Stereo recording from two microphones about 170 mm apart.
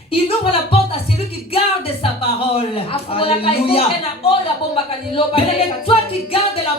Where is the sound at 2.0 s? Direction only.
35° left (ahead or behind).